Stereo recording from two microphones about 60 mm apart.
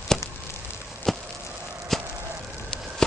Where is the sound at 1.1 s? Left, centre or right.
Centre.